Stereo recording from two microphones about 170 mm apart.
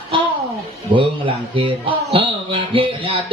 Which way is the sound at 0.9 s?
30° right (ahead or behind).